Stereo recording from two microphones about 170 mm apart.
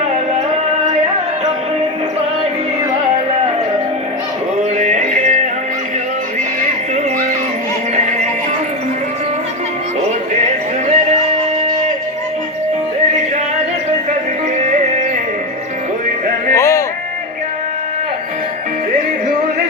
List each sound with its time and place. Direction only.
4.8 s music: 45° right (ahead or behind)
10.0 s music: 40° right (ahead or behind)
16.6 s a sound: 15° left (ahead or behind)